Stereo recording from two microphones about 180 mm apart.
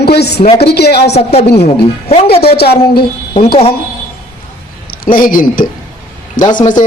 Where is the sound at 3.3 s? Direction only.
30° left (ahead or behind).